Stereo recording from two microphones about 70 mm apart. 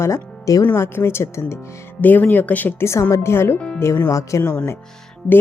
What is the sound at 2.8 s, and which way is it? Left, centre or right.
Speech, left.